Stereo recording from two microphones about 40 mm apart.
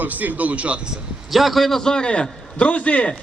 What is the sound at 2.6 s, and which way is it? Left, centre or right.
Speech, left.